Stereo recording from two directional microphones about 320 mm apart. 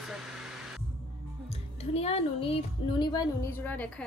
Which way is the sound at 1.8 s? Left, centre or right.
Centre.